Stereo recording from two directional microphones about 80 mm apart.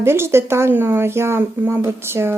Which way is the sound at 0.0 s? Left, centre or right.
Right.